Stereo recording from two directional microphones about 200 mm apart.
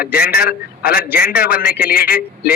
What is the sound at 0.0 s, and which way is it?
A man's voice, 50° left (ahead or behind).